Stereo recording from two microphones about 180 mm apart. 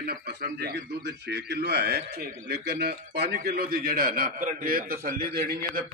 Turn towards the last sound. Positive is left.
turn(degrees=-60)  # may be behind; listen again after turning